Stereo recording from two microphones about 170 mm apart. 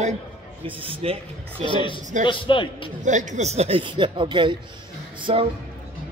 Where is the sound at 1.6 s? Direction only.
30° left (ahead or behind).